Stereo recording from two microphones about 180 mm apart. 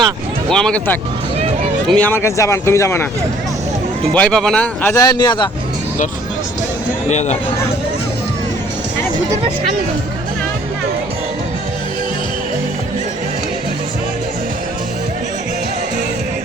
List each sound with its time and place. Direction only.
0.5 s speech: 5° left (ahead or behind)
4.1 s speech: 5° left (ahead or behind)
4.9 s a man's voice: 25° left (ahead or behind)
7.1 s speech: 40° left (ahead or behind)